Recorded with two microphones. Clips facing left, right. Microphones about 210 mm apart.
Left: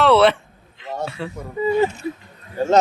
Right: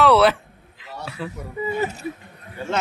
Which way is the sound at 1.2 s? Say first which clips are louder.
Left 2 dB; 25° left (ahead or behind).